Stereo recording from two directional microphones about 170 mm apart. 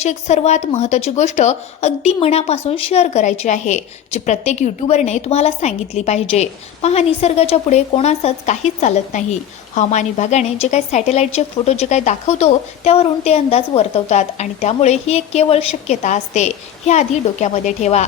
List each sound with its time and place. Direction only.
0.0 s a woman's voice: 40° left (ahead or behind)